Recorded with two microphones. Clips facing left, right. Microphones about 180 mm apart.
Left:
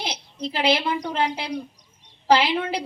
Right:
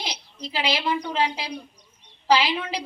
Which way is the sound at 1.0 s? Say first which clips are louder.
Left 1 dB; 50° left (ahead or behind).